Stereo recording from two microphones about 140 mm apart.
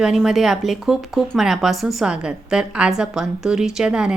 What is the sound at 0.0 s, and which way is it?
Speech, 5° right (ahead or behind).